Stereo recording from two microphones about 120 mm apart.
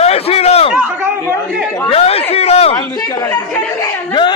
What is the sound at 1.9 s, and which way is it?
Chatter, 55° left (ahead or behind).